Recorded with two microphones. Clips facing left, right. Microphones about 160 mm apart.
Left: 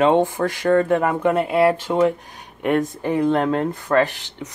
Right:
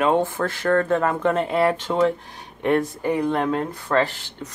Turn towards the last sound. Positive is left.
turn(degrees=15)  # may be behind; listen again after turning